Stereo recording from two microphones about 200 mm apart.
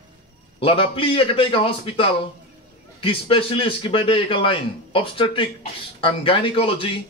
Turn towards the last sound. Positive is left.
turn(degrees=25)  # may be behind; listen again after turning